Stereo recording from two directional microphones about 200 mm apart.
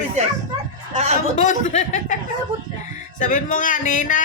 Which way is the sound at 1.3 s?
40° left (ahead or behind).